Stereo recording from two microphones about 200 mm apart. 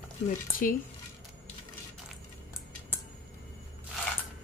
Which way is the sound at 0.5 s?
45° left (ahead or behind).